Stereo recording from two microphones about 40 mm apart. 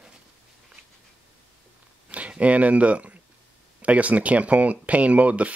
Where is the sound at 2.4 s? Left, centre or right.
Right.